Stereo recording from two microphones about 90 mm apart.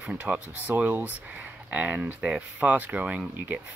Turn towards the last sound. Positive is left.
turn(degrees=-15)  # may be behind; listen again after turning